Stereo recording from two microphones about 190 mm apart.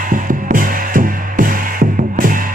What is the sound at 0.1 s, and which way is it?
Music, 45° right (ahead or behind).